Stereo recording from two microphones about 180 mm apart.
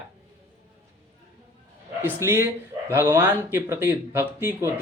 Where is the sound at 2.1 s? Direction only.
15° right (ahead or behind).